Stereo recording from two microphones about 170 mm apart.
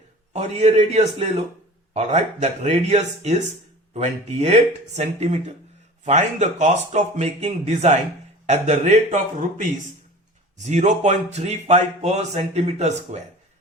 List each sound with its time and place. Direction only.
0.3 s speech: 40° right (ahead or behind)